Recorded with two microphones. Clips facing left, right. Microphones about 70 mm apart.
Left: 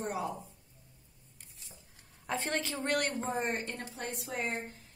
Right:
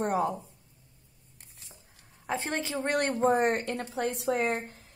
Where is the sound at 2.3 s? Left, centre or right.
Centre.